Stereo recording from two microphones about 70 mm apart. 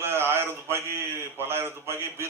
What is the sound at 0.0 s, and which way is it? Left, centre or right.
A man's voice, right.